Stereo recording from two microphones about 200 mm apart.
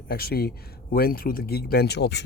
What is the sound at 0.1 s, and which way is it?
Speech, 50° left (ahead or behind).